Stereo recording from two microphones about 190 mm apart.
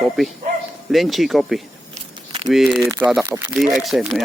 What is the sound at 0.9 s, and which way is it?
Speech, centre (ahead or behind).